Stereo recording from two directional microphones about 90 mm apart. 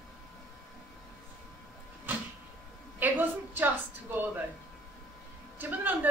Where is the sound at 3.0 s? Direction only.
20° right (ahead or behind).